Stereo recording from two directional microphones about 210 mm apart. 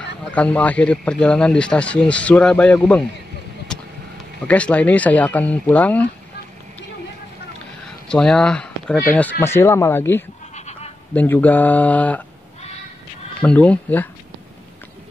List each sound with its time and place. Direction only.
0.2 s a man's voice: 5° left (ahead or behind)
4.5 s speech: 5° left (ahead or behind)
8.1 s speech: 5° left (ahead or behind)
10.5 s bleat: 30° left (ahead or behind)
11.1 s speech: 10° left (ahead or behind)
13.4 s speech: 5° left (ahead or behind)